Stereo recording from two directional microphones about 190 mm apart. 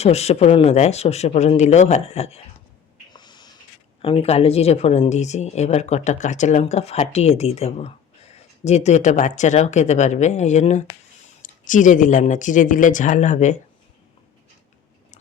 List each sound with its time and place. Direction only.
0.0 s speech: 35° left (ahead or behind)
3.1 s a sound: 25° left (ahead or behind)
4.0 s speech: 30° left (ahead or behind)